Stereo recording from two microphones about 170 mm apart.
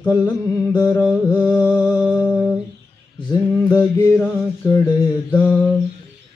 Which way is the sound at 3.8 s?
5° left (ahead or behind).